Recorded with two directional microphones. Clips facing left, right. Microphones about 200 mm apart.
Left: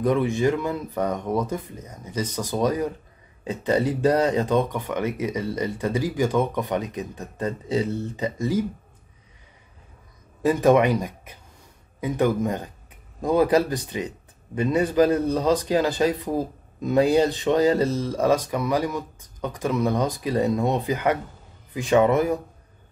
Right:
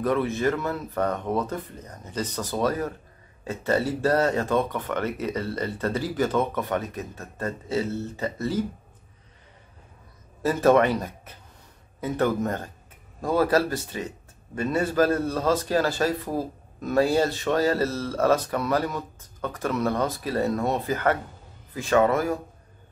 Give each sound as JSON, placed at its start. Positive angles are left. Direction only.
{"t": 0.0, "sound": "speech", "side_deg": 15}
{"t": 10.4, "sound": "speech", "side_deg": 15}